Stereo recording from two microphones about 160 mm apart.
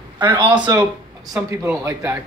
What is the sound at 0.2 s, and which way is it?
Speech, 30° right (ahead or behind).